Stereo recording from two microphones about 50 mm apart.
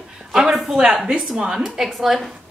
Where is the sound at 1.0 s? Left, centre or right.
Right.